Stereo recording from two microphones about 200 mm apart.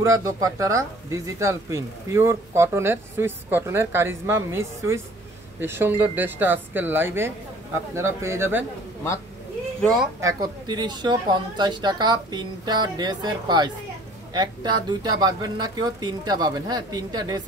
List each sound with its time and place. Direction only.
0.0 s speech: 15° right (ahead or behind)
10.2 s speech: 20° right (ahead or behind)